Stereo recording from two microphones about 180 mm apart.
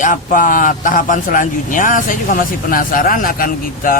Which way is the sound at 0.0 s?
45° left (ahead or behind).